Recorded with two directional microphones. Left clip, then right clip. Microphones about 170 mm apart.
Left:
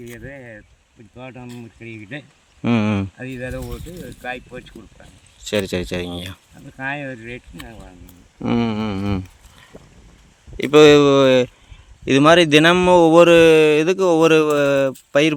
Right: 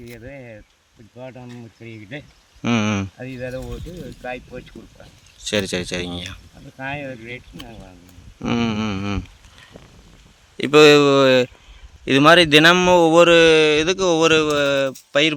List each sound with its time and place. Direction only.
0.0 s speech: centre (ahead or behind)
2.6 s speech: 15° left (ahead or behind)
3.2 s speech: centre (ahead or behind)
5.4 s speech: 15° left (ahead or behind)
6.7 s speech: 5° right (ahead or behind)
8.4 s speech: 20° left (ahead or behind); by 15.4 s 35° left (ahead or behind)